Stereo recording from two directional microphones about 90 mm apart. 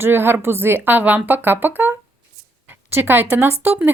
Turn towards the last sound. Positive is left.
turn(degrees=-20)  # may be behind; listen again after turning